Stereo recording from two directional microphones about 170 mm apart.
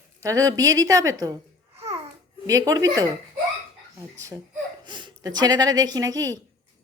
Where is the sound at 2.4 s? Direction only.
20° right (ahead or behind).